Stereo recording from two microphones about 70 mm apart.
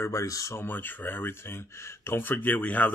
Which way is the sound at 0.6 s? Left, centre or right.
Left.